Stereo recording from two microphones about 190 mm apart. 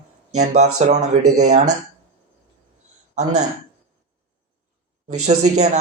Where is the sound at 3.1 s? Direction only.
35° right (ahead or behind).